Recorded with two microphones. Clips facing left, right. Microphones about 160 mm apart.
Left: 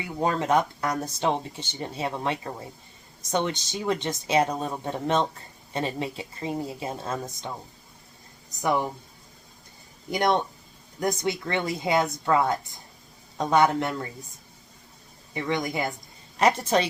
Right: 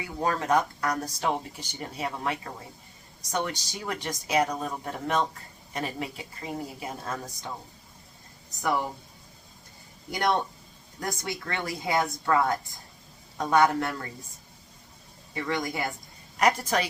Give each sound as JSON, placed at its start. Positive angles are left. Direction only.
{"t": 0.0, "sound": "speech", "side_deg": 20}
{"t": 10.1, "sound": "speech", "side_deg": 20}
{"t": 15.4, "sound": "speech", "side_deg": 20}